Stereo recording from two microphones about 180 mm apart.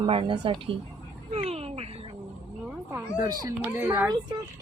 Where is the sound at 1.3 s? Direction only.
35° right (ahead or behind).